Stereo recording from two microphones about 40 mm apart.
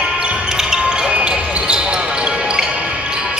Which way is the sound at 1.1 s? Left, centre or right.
Right.